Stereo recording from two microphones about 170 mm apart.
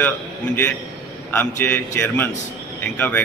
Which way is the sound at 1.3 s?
10° left (ahead or behind).